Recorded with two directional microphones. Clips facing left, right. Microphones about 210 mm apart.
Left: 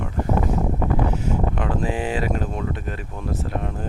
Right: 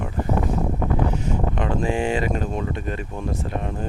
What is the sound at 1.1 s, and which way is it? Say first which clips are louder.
Speech: left 1 dB; 5° left (ahead or behind).